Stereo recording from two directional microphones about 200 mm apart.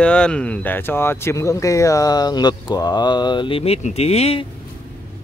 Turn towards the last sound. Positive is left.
turn(degrees=30)  # may be behind; listen again after turning